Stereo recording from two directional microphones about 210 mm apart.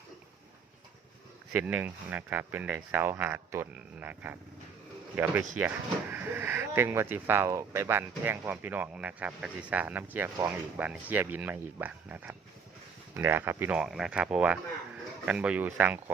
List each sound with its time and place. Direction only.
1.5 s speech: 5° right (ahead or behind)